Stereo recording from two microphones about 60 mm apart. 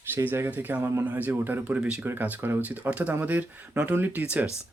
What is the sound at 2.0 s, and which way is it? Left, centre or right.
Speech, right.